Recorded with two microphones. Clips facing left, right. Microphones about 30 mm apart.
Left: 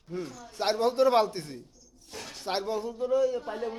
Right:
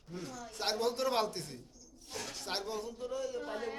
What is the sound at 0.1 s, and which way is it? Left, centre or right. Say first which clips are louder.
A man's voice: left 7 dB; centre.